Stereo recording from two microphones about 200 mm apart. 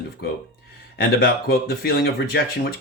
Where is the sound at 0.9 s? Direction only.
50° left (ahead or behind).